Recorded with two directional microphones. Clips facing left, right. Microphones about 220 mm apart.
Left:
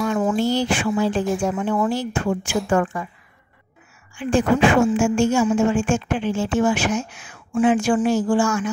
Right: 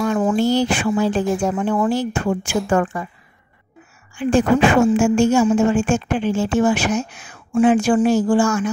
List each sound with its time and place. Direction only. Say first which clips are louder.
0.1 s a woman's voice: right 4 dB; 50° right (ahead or behind)
4.2 s a woman's voice: right 2 dB; 40° right (ahead or behind)